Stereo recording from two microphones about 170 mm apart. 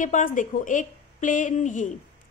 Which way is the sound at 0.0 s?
50° left (ahead or behind).